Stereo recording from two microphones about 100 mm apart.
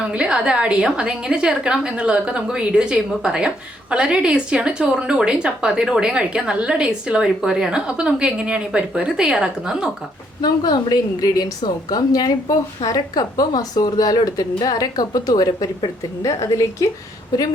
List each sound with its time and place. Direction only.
0.1 s a woman's voice: 10° right (ahead or behind)
10.4 s a woman's voice: 45° left (ahead or behind)